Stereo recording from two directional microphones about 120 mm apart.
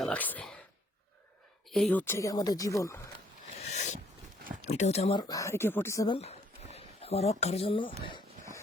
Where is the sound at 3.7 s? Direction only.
75° left (ahead or behind).